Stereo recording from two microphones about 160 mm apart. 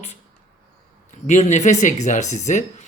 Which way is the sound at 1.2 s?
45° left (ahead or behind).